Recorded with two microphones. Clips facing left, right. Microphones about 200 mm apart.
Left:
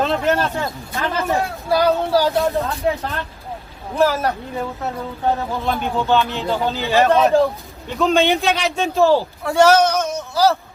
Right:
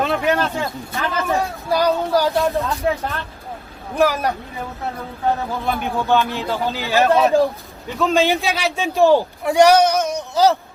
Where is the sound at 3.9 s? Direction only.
15° right (ahead or behind).